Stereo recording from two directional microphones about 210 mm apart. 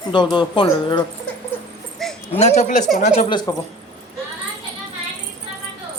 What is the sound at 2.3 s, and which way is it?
Speech, 30° left (ahead or behind).